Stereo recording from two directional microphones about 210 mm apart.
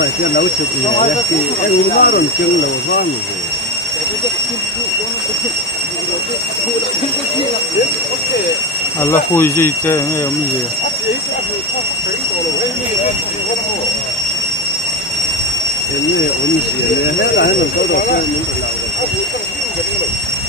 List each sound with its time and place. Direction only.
2.0 s speech: 45° left (ahead or behind)
9.0 s speech: 10° left (ahead or behind)
17.2 s speech: 55° left (ahead or behind)